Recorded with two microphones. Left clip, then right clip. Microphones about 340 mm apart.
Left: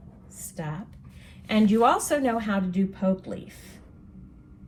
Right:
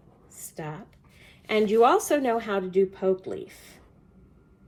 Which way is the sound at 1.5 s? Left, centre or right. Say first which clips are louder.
Right 1 dB; centre.